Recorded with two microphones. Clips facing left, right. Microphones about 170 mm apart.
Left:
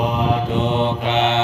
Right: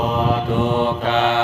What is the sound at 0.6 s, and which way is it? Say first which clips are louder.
Mantra: right 1 dB; 20° left (ahead or behind).